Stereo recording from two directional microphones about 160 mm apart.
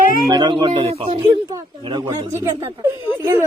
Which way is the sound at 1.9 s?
25° right (ahead or behind).